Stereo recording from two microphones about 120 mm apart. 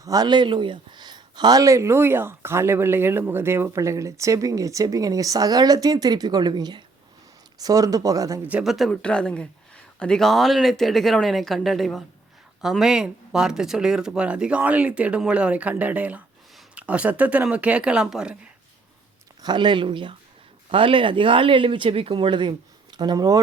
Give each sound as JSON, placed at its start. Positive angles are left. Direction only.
{"t": 0.0, "sound": "speech", "side_deg": -30}
{"t": 8.4, "sound": "speech", "side_deg": -10}
{"t": 8.7, "sound": "speech", "side_deg": 5}
{"t": 19.4, "sound": "speech", "side_deg": -40}